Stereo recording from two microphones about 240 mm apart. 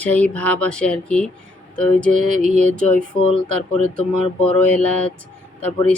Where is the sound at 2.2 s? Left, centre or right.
Right.